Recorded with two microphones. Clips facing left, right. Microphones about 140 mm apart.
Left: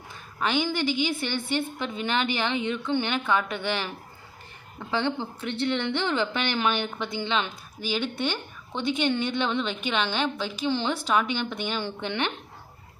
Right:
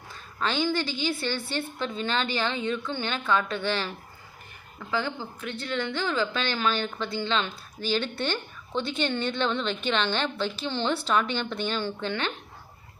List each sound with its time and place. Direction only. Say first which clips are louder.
0.3 s a woman's voice: even; 15° left (ahead or behind)
4.9 s a woman's voice: left 3 dB; 25° left (ahead or behind)